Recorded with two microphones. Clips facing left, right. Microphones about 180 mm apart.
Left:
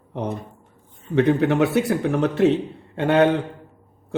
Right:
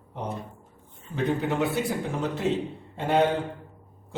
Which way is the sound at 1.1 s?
70° left (ahead or behind).